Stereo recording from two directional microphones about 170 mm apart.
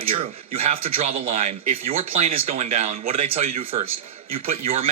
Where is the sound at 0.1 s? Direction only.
35° right (ahead or behind).